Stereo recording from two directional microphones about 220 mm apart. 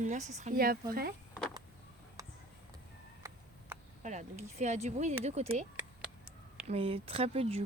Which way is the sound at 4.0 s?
35° right (ahead or behind).